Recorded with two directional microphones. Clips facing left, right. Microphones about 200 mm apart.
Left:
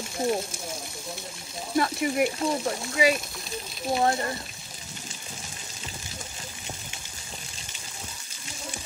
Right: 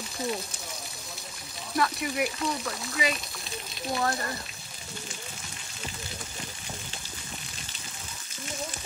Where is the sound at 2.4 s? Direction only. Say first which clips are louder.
Left 5 dB; 30° left (ahead or behind).